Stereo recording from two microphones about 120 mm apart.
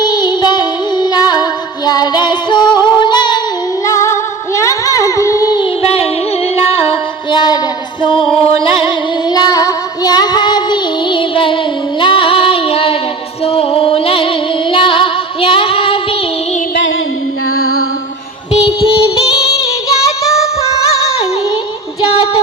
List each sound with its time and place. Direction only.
0.0 s music: 35° left (ahead or behind)
3.8 s music: 25° left (ahead or behind)
5.8 s music: 55° left (ahead or behind)
9.3 s child singing: 30° left (ahead or behind); by 13.0 s 50° left (ahead or behind)
13.4 s music: 50° left (ahead or behind)
14.7 s female singing: 45° left (ahead or behind)
19.2 s music: 30° left (ahead or behind)